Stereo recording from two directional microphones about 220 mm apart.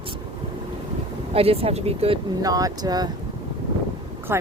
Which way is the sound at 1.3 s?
25° right (ahead or behind).